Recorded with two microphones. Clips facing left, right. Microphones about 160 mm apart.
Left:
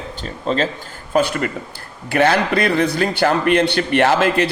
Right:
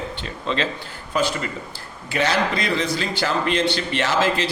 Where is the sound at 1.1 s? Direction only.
55° left (ahead or behind).